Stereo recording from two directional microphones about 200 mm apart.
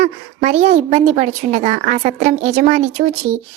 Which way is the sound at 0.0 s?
35° right (ahead or behind).